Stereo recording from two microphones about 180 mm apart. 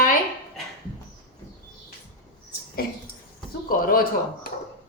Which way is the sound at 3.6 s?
50° left (ahead or behind).